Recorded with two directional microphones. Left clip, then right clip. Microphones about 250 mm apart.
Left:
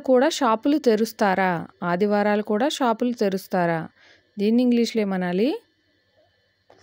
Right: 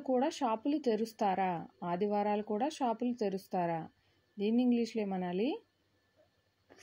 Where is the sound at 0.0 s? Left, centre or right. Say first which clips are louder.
Left 14 dB; left.